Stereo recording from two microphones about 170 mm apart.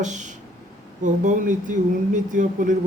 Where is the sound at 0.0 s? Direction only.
45° right (ahead or behind).